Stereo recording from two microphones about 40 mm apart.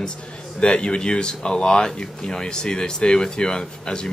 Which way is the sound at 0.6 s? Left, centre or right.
Left.